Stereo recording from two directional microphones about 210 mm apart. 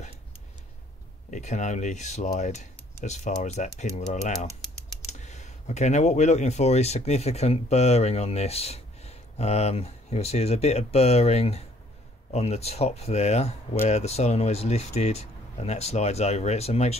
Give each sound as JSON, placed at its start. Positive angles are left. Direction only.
{"t": 1.3, "sound": "speech", "side_deg": 35}